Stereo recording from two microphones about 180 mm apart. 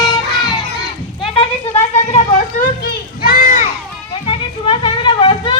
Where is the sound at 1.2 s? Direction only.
30° left (ahead or behind).